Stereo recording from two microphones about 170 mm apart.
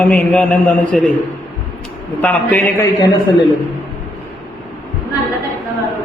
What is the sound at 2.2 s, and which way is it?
Speech, 10° left (ahead or behind).